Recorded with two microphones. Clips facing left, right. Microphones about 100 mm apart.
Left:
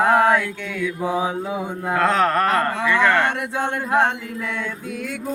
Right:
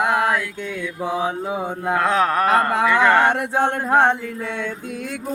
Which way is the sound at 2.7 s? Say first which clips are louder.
Right 3 dB; 50° right (ahead or behind).